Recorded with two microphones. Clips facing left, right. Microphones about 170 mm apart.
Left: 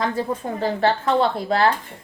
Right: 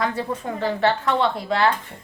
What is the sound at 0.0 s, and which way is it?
Speech, 40° left (ahead or behind).